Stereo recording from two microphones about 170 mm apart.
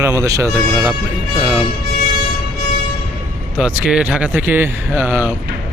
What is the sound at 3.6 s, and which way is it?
Speech, 5° right (ahead or behind).